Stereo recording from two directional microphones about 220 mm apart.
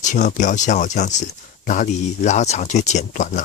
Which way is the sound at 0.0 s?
35° left (ahead or behind).